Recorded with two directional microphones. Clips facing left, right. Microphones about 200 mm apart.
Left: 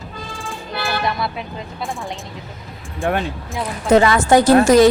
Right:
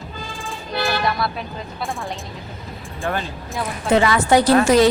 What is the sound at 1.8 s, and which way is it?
Speech, centre (ahead or behind).